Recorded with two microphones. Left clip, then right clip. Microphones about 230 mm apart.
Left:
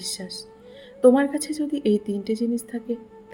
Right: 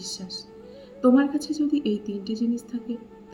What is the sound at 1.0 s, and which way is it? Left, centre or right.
A woman's voice, left.